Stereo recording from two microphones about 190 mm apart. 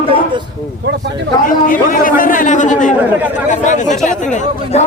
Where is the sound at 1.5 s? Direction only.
45° left (ahead or behind).